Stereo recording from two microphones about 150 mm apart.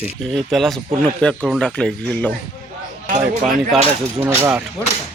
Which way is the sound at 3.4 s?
Centre (ahead or behind).